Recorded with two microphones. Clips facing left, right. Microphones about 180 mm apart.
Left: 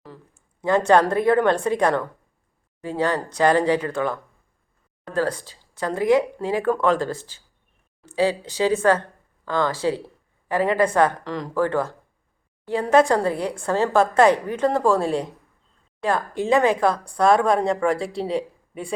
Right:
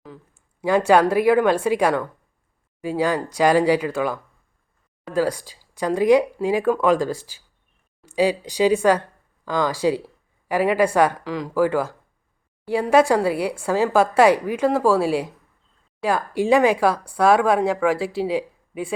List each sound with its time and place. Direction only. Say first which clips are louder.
0.6 s speech: right 1 dB; 10° right (ahead or behind)